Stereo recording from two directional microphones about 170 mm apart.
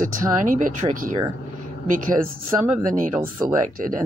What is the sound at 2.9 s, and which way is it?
Speech, 50° right (ahead or behind).